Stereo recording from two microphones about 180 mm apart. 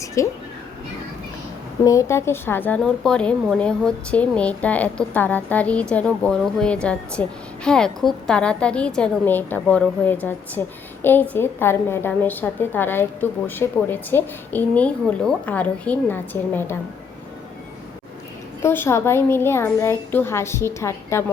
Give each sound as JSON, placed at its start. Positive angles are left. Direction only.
{"t": 0.0, "sound": "a sound", "side_deg": 15}
{"t": 1.8, "sound": "speech", "side_deg": 15}
{"t": 18.6, "sound": "speech", "side_deg": 15}